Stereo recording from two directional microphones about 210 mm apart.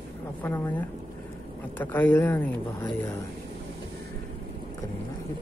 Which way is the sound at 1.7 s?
10° left (ahead or behind).